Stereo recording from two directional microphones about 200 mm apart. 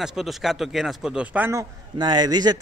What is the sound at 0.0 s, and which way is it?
Speech, centre (ahead or behind).